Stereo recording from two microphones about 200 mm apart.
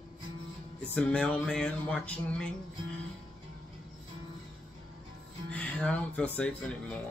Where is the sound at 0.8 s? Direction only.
5° left (ahead or behind).